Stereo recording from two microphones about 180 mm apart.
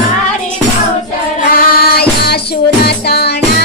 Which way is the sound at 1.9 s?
60° left (ahead or behind).